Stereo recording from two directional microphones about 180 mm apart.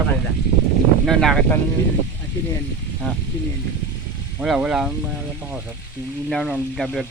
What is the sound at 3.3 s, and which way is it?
Speech, 15° left (ahead or behind).